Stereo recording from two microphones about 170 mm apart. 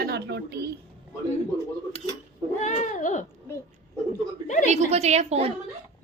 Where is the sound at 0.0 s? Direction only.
75° right (ahead or behind).